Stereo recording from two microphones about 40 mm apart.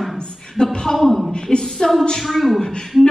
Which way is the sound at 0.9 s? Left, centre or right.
Centre.